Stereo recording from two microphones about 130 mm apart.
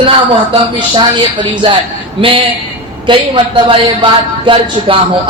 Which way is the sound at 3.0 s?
40° right (ahead or behind).